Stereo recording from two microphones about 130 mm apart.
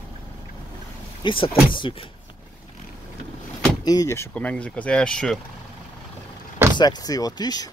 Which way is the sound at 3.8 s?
30° left (ahead or behind).